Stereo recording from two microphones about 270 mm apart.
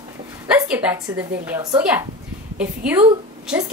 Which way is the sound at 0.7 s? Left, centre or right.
Centre.